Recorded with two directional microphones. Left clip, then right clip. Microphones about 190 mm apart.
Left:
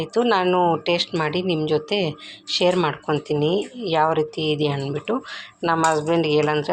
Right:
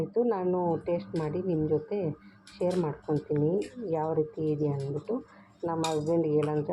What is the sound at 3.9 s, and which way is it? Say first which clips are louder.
Speech: left 10 dB; 30° left (ahead or behind).